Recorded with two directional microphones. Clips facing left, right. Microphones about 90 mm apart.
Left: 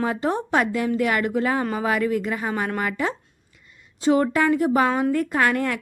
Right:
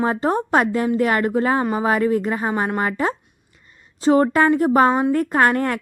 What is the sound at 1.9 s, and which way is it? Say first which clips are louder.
A woman's voice: right 4 dB; 35° right (ahead or behind).